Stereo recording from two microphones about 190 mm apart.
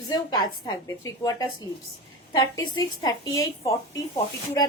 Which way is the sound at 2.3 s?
20° left (ahead or behind).